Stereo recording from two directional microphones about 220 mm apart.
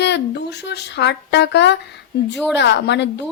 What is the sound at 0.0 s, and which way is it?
A woman's voice, 50° left (ahead or behind).